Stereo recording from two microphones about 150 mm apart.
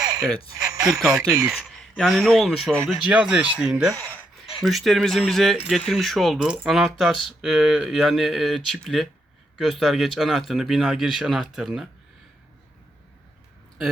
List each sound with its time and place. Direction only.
0.0 s a sound: 25° right (ahead or behind)
0.5 s frog: 25° right (ahead or behind)
0.9 s speech: centre (ahead or behind)
3.9 s speech: 10° left (ahead or behind)
4.6 s speech: centre (ahead or behind)